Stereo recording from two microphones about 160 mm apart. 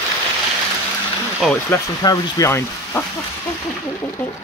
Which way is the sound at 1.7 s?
25° left (ahead or behind).